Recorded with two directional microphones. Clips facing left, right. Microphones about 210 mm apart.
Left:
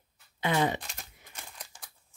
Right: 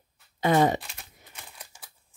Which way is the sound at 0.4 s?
40° right (ahead or behind).